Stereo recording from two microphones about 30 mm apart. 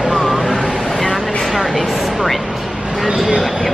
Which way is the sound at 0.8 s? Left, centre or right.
Centre.